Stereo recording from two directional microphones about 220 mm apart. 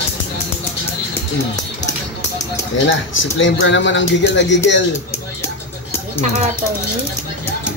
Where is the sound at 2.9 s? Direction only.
60° left (ahead or behind).